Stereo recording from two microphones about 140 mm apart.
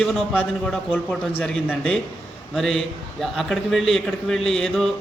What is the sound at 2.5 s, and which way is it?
A man's voice, centre (ahead or behind).